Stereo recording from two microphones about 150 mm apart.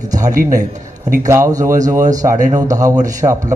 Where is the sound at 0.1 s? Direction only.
20° right (ahead or behind).